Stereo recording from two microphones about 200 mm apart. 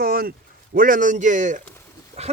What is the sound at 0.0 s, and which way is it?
Speech, 50° right (ahead or behind).